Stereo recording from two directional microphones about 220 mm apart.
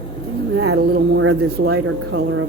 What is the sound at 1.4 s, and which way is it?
Speech, 45° right (ahead or behind).